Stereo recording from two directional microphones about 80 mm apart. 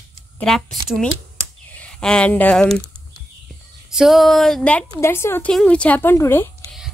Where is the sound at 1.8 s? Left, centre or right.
Centre.